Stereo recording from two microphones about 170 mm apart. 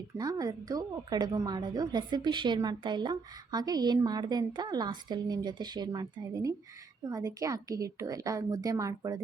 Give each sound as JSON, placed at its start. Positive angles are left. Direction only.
{"t": 0.2, "sound": "a woman's voice", "side_deg": -20}